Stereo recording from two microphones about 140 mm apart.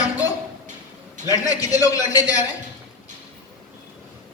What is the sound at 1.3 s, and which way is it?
Speech, 25° left (ahead or behind).